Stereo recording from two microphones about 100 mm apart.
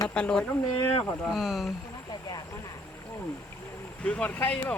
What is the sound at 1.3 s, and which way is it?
Speech, centre (ahead or behind).